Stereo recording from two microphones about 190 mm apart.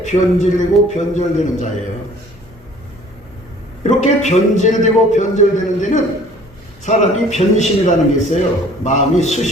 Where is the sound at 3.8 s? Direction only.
40° left (ahead or behind).